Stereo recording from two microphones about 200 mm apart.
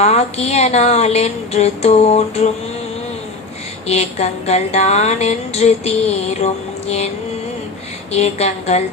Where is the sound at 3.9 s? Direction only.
30° left (ahead or behind).